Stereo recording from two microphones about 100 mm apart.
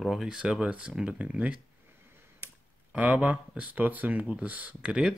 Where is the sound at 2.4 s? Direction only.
25° right (ahead or behind).